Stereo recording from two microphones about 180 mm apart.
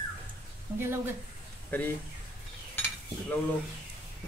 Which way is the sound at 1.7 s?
10° left (ahead or behind).